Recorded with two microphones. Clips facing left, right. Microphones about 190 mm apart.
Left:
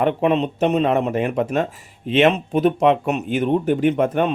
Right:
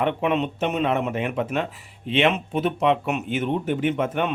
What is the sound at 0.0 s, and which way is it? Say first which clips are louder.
Speech: left 4 dB; 35° left (ahead or behind).